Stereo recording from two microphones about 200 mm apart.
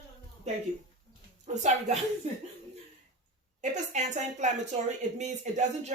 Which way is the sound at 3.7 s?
35° right (ahead or behind).